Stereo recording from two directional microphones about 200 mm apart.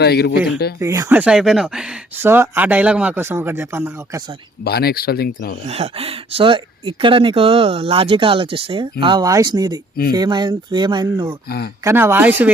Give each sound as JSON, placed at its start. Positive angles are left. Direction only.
{"t": 0.0, "sound": "speech", "side_deg": 55}
{"t": 0.8, "sound": "speech", "side_deg": -15}
{"t": 4.6, "sound": "speech", "side_deg": 50}
{"t": 5.6, "sound": "speech", "side_deg": -30}
{"t": 11.4, "sound": "speech", "side_deg": 50}
{"t": 11.8, "sound": "speech", "side_deg": -15}